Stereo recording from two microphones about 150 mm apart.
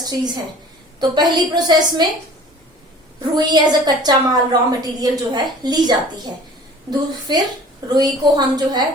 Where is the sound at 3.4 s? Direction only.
25° right (ahead or behind).